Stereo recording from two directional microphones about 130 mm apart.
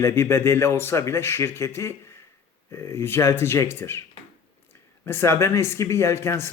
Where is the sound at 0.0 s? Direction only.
20° left (ahead or behind).